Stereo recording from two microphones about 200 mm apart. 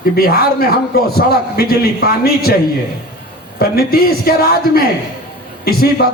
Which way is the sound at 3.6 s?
50° left (ahead or behind).